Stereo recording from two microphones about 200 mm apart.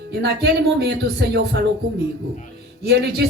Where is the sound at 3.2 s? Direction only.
55° right (ahead or behind).